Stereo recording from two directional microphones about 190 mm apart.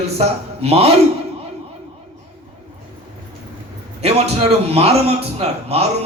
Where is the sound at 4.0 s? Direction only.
35° right (ahead or behind).